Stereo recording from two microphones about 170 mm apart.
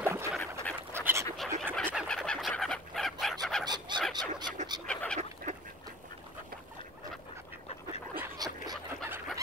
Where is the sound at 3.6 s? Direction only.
25° right (ahead or behind).